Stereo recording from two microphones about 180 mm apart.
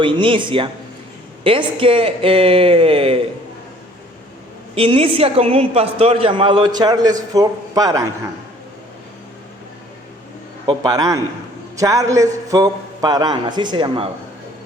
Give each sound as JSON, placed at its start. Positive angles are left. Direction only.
{"t": 0.0, "sound": "a woman's voice", "side_deg": -30}
{"t": 4.7, "sound": "a woman's voice", "side_deg": -30}
{"t": 10.7, "sound": "a woman's voice", "side_deg": -20}